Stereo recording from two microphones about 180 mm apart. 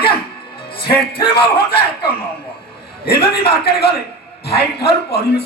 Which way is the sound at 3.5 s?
60° left (ahead or behind).